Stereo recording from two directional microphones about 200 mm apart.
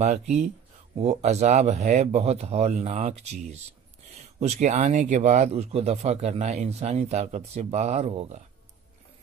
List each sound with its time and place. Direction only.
0.0 s speech: 35° right (ahead or behind)